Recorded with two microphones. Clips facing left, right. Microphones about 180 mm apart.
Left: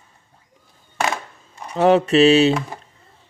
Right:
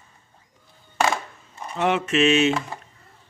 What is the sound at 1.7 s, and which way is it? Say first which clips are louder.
Speech: left 8 dB; 35° left (ahead or behind).